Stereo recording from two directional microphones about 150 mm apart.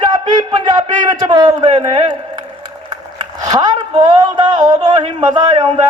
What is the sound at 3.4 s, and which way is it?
A man's voice, 25° right (ahead or behind).